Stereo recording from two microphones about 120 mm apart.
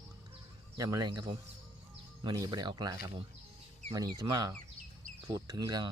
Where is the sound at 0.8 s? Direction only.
30° right (ahead or behind).